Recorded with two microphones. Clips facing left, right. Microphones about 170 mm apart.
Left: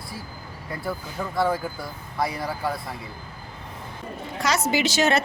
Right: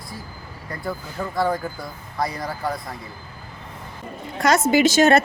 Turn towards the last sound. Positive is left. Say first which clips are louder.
# right 6 dB
turn(degrees=-50)  # may be behind; listen again after turning